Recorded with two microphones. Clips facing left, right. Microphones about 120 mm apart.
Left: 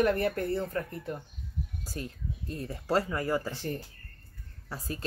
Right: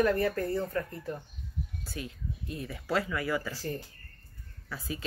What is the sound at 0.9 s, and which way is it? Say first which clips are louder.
Speech: left 1 dB; 10° left (ahead or behind).